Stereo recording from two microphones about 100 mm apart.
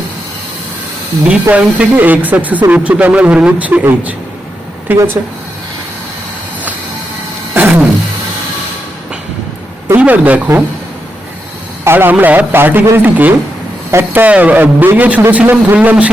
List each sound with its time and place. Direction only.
1.3 s a man's voice: 10° right (ahead or behind)
7.5 s a sound: 15° right (ahead or behind)
10.0 s speech: 15° right (ahead or behind)
11.9 s a man's voice: 20° right (ahead or behind)